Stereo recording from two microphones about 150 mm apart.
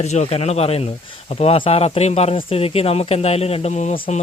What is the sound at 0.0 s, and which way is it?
A man's voice, 45° left (ahead or behind).